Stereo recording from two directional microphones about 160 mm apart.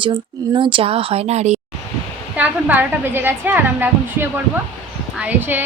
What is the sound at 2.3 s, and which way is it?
A woman's voice, 10° right (ahead or behind).